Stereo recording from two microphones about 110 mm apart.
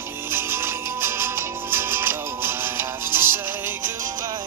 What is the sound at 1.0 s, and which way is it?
Music, 20° right (ahead or behind).